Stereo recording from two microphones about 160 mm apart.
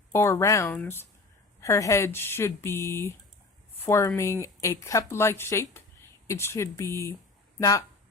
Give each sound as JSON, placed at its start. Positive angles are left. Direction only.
{"t": 0.1, "sound": "speech", "side_deg": 15}